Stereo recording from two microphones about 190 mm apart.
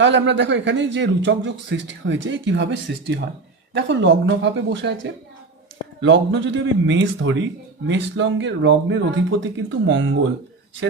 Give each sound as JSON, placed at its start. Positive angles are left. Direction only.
{"t": 0.0, "sound": "a man's voice", "side_deg": -70}